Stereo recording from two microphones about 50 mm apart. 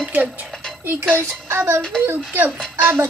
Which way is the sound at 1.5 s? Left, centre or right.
Right.